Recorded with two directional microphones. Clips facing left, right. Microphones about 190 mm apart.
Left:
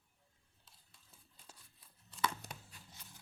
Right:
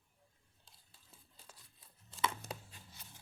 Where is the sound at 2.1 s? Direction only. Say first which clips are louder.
Right 1 dB; 30° right (ahead or behind).